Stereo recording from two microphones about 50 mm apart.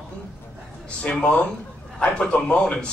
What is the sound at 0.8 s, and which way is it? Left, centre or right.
A man's voice, left.